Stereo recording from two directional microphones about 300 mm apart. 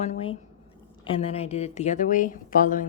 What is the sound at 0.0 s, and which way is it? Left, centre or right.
A woman's voice, left.